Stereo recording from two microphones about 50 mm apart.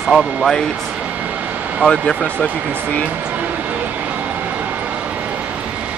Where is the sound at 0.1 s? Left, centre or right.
Centre.